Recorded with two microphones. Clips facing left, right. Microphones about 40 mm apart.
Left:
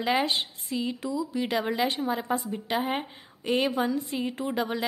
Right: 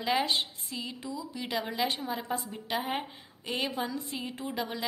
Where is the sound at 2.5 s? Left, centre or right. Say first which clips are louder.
Left 4 dB; centre.